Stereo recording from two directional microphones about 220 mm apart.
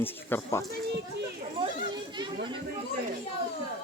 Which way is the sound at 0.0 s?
10° left (ahead or behind).